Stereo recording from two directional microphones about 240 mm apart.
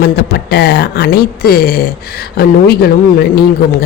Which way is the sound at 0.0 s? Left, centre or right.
Left.